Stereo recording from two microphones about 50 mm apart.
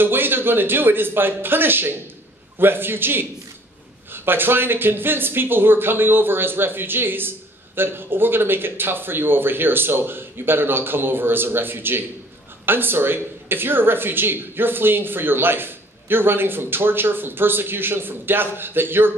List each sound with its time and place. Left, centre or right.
0.0 s speech: right